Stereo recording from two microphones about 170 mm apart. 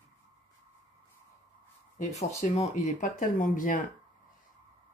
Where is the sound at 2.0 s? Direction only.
40° left (ahead or behind).